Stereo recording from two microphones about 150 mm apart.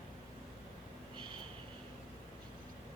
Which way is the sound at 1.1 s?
30° right (ahead or behind).